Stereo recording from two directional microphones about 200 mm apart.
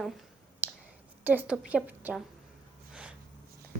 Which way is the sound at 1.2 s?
10° right (ahead or behind).